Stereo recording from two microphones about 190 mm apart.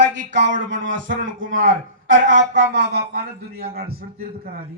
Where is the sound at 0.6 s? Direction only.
80° right.